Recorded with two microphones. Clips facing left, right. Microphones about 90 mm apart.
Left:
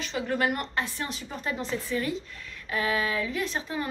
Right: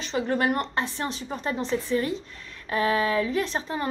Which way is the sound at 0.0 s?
30° right (ahead or behind).